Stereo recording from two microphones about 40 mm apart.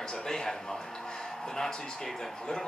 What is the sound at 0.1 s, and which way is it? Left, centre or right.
A man's voice, centre.